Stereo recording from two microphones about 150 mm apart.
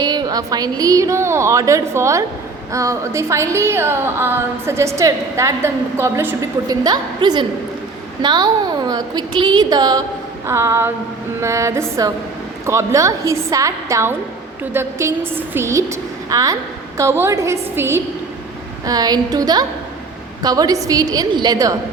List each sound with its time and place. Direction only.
0.0 s a woman's voice: 30° right (ahead or behind)